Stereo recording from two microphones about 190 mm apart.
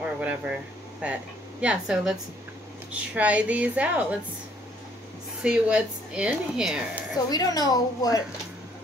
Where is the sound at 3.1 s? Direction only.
5° right (ahead or behind).